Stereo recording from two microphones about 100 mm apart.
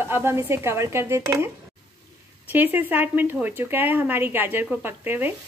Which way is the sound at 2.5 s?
20° right (ahead or behind).